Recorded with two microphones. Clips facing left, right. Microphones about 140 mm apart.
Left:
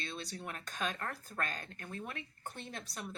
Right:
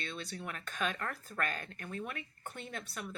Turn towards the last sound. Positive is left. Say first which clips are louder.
# right 2 dB
turn(degrees=35)  # may be behind; listen again after turning